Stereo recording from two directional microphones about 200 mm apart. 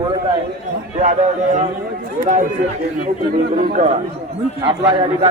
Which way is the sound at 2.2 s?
40° right (ahead or behind).